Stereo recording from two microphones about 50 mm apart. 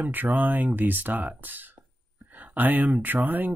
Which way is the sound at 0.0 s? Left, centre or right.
Right.